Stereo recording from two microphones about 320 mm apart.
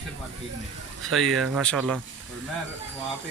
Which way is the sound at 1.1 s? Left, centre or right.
Centre.